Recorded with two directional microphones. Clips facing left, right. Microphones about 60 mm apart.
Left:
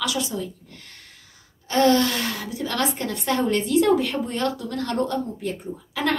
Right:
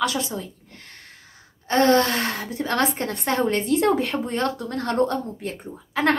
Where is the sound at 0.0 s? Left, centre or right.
Right.